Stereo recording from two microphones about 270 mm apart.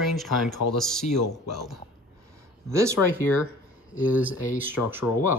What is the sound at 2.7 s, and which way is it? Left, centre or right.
Speech, centre.